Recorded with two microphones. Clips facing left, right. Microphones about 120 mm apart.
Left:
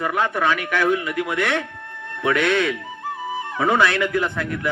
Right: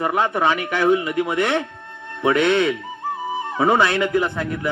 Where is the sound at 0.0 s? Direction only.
20° right (ahead or behind).